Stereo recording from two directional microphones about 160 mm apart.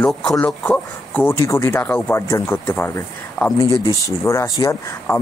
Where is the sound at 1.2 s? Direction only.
20° left (ahead or behind).